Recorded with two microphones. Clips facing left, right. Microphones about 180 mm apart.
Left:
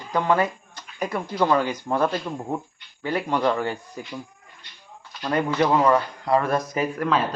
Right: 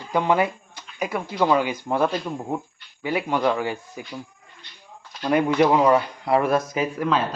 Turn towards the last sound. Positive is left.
turn(degrees=0)  # may be behind; listen again after turning